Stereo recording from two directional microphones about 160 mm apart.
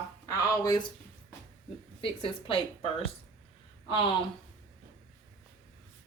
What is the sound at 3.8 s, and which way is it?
Speech, 35° left (ahead or behind).